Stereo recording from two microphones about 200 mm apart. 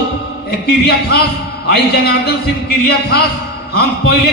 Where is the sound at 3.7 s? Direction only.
55° left (ahead or behind).